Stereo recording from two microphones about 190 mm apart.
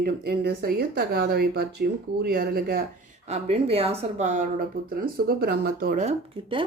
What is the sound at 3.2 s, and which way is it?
Speech, 35° right (ahead or behind).